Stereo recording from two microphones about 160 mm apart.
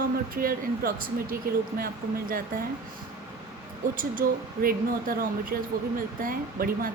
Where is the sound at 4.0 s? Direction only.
60° right (ahead or behind).